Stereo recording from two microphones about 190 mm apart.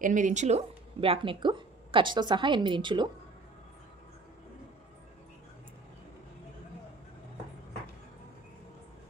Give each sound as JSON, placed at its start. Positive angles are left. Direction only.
{"t": 0.0, "sound": "speech", "side_deg": -40}